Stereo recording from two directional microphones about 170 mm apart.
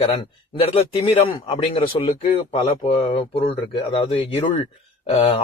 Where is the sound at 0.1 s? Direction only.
35° left (ahead or behind).